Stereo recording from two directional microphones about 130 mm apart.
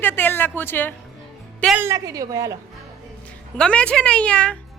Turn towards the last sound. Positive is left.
turn(degrees=10)  # may be behind; listen again after turning